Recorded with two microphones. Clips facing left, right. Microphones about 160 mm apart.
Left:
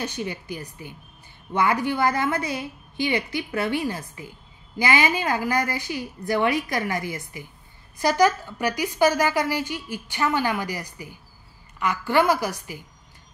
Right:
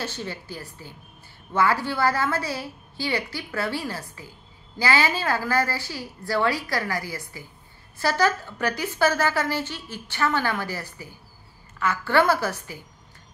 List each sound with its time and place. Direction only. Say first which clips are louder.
0.0 s a woman's voice: left 2 dB; 15° left (ahead or behind)